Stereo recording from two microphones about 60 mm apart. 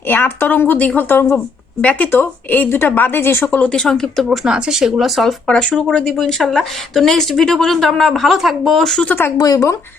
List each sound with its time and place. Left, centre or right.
0.1 s speech: left
1.8 s speech: left
2.1 s speech: left
3.7 s speech: centre
4.3 s speech: centre
5.5 s speech: centre
9.4 s speech: left